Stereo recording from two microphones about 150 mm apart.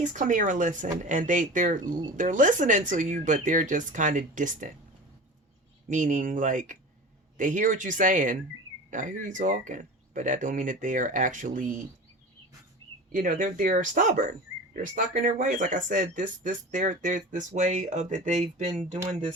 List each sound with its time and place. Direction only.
0.0 s speech: 55° right (ahead or behind)
5.9 s speech: 55° right (ahead or behind)
13.1 s speech: 60° right (ahead or behind)